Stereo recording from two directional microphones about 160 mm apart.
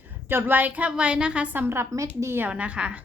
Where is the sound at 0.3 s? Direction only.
15° right (ahead or behind).